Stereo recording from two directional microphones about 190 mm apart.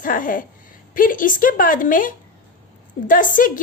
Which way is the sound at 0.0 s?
45° left (ahead or behind).